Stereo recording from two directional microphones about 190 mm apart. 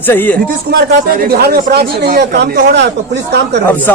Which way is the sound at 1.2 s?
55° right (ahead or behind).